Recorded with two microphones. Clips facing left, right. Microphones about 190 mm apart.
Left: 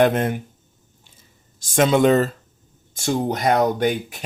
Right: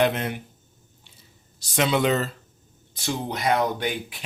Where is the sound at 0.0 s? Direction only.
50° left (ahead or behind).